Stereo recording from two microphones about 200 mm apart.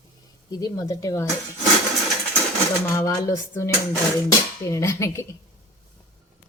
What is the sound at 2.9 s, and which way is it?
A woman's voice, 15° left (ahead or behind).